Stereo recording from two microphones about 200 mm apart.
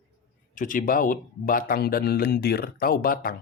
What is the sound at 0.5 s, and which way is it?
A man's voice, 40° left (ahead or behind).